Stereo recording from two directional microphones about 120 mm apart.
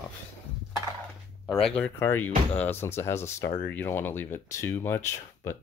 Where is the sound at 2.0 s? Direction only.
20° left (ahead or behind).